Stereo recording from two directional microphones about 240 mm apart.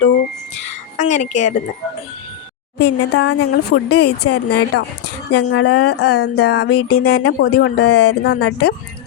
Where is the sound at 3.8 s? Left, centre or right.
Left.